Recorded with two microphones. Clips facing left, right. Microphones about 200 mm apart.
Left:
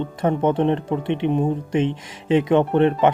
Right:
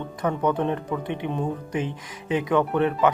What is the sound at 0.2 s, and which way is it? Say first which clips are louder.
A man's voice: left 4 dB; 25° left (ahead or behind).